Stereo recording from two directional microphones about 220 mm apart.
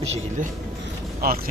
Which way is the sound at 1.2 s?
40° right (ahead or behind).